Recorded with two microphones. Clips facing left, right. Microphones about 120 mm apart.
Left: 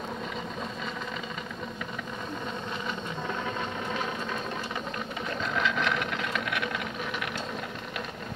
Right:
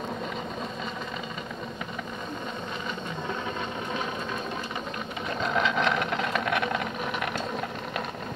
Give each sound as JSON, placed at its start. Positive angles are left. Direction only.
{"t": 5.6, "sound": "vehicle", "side_deg": -20}